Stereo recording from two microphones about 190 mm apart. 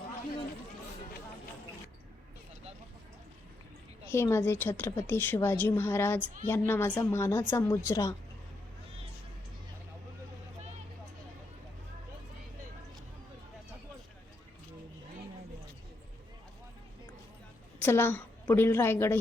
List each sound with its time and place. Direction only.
4.0 s a woman's voice: 15° left (ahead or behind)
17.7 s a woman's voice: 10° left (ahead or behind)